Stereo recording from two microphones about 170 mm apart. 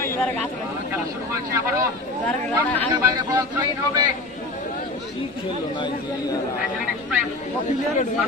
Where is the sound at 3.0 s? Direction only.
20° right (ahead or behind).